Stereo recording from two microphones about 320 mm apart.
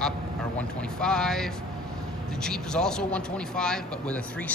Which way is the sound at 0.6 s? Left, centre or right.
Centre.